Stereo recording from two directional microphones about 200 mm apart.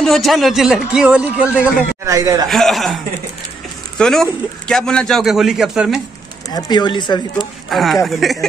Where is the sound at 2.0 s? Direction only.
15° right (ahead or behind).